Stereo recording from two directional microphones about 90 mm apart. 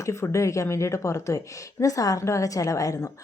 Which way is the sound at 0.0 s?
35° left (ahead or behind).